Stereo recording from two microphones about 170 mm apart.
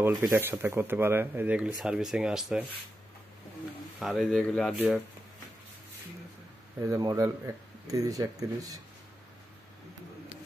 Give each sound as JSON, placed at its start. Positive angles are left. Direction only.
{"t": 0.0, "sound": "speech", "side_deg": -20}
{"t": 4.0, "sound": "speech", "side_deg": 0}
{"t": 6.9, "sound": "speech", "side_deg": -20}